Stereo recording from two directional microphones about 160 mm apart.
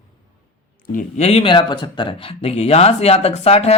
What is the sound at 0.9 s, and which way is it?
Speech, 40° left (ahead or behind).